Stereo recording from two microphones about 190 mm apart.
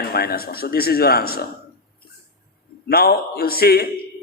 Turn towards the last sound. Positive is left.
turn(degrees=55)  # may be behind; listen again after turning